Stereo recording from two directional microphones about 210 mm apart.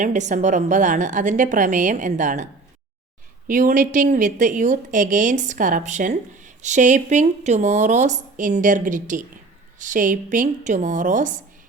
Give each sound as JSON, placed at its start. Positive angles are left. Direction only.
{"t": 0.0, "sound": "a woman's voice", "side_deg": -35}